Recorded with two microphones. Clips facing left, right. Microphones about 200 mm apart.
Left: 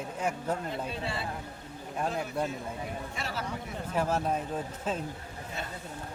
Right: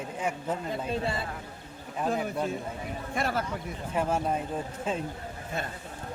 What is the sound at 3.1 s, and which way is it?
Speech, 55° right (ahead or behind).